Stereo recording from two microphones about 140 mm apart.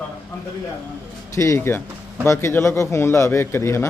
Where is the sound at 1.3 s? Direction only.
20° left (ahead or behind).